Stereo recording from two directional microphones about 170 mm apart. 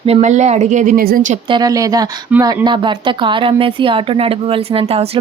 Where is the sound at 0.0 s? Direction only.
40° right (ahead or behind).